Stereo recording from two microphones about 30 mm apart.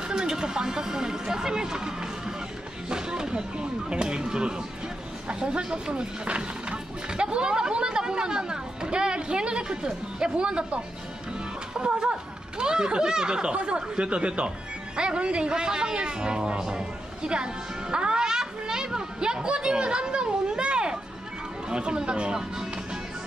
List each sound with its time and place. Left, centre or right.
0.1 s speech: right
6.2 s speech: right
7.1 s speech: right
11.7 s speech: right